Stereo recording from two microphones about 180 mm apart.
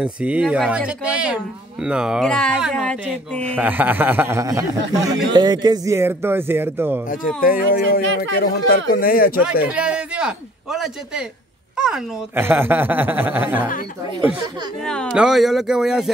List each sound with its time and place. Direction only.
0.0 s speech: 5° right (ahead or behind)
3.5 s speech: 10° right (ahead or behind)
7.4 s speech: 50° left (ahead or behind)
9.7 s a man's voice: 5° right (ahead or behind)
14.8 s speech: 5° left (ahead or behind)